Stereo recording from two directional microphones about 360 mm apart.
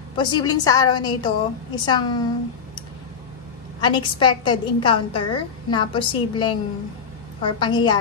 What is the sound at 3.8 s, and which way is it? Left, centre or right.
Speech, centre.